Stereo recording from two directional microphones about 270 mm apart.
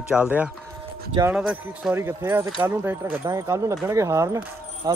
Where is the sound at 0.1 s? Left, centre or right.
Centre.